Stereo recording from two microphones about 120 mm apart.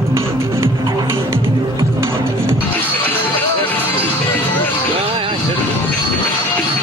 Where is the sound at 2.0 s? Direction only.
20° right (ahead or behind).